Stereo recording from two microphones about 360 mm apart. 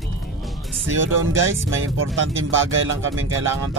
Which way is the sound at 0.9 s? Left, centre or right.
Right.